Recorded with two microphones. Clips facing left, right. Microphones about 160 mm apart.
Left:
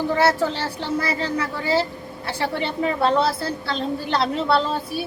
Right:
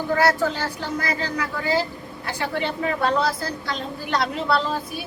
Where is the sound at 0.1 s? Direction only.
25° left (ahead or behind).